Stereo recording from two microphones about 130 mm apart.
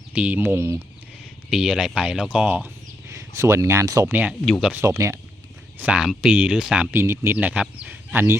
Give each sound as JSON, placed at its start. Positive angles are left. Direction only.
{"t": 0.1, "sound": "speech", "side_deg": -10}
{"t": 1.5, "sound": "speech", "side_deg": -5}
{"t": 3.1, "sound": "speech", "side_deg": -25}
{"t": 4.1, "sound": "speech", "side_deg": -15}
{"t": 4.8, "sound": "speech", "side_deg": -25}
{"t": 5.8, "sound": "speech", "side_deg": -5}
{"t": 6.9, "sound": "speech", "side_deg": -20}